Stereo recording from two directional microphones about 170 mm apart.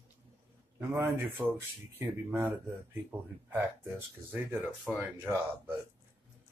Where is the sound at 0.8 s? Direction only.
15° right (ahead or behind).